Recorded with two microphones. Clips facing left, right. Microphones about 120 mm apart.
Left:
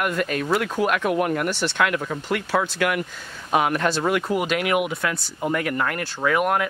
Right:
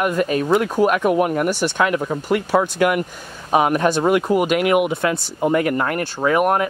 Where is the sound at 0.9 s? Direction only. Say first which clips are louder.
Right 4 dB; 10° right (ahead or behind).